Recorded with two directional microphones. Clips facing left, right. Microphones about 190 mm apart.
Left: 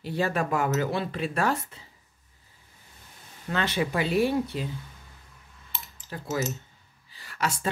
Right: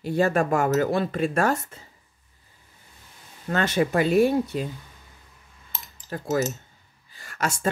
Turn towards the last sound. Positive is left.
turn(degrees=-45)  # may be behind; listen again after turning